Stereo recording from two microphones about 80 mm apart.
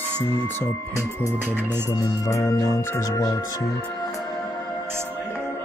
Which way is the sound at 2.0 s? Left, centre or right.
Left.